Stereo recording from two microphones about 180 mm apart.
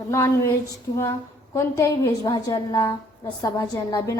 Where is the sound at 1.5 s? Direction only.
15° left (ahead or behind).